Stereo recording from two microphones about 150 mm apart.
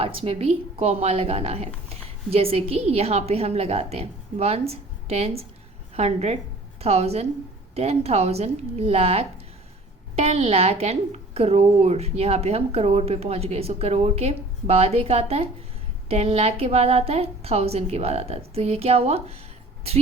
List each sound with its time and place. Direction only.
0.0 s a woman's voice: 40° right (ahead or behind)